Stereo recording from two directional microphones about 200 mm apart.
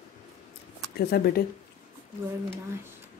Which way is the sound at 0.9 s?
50° left (ahead or behind).